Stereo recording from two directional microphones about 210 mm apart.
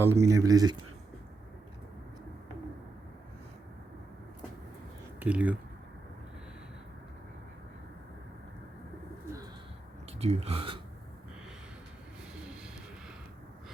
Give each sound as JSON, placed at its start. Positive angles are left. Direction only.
{"t": 0.0, "sound": "speech", "side_deg": -10}
{"t": 5.2, "sound": "speech", "side_deg": -5}
{"t": 10.2, "sound": "speech", "side_deg": -30}
{"t": 12.4, "sound": "a sound", "side_deg": -5}